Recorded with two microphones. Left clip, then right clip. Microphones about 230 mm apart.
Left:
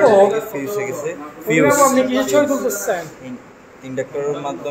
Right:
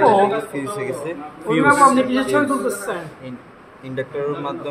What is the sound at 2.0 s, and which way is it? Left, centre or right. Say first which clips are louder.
Speech: left 2 dB; centre.